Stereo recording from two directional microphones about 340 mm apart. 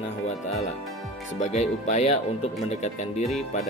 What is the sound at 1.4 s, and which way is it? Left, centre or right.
Speech, centre.